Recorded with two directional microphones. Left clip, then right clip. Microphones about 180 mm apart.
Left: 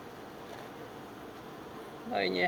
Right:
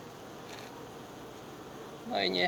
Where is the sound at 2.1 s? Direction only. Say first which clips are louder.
Right 1 dB; 35° right (ahead or behind).